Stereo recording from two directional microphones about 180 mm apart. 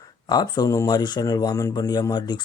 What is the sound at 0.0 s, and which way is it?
Speech, 20° left (ahead or behind).